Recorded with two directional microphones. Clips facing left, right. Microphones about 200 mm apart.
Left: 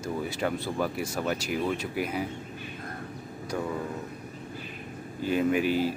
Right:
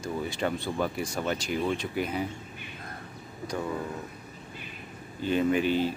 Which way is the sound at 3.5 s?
5° left (ahead or behind).